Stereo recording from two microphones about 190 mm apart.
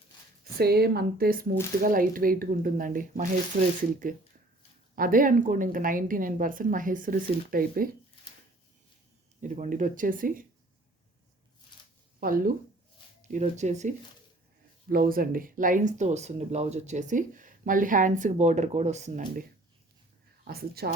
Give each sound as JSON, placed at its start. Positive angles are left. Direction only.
{"t": 0.6, "sound": "a woman's voice", "side_deg": -55}
{"t": 4.9, "sound": "a woman's voice", "side_deg": -45}
{"t": 9.4, "sound": "a woman's voice", "side_deg": -40}
{"t": 12.2, "sound": "a woman's voice", "side_deg": -45}
{"t": 14.8, "sound": "speech", "side_deg": -50}
{"t": 20.5, "sound": "speech", "side_deg": -55}